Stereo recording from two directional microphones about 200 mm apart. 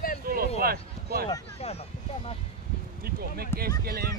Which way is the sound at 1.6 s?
30° left (ahead or behind).